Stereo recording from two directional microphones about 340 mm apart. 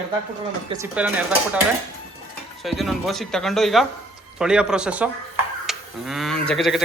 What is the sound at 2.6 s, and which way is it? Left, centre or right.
Speech, centre.